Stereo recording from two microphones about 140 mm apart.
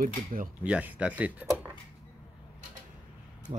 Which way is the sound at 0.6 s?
10° right (ahead or behind).